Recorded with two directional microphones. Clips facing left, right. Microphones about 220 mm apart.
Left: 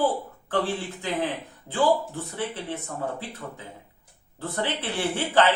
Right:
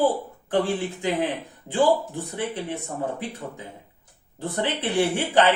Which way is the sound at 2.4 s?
15° right (ahead or behind).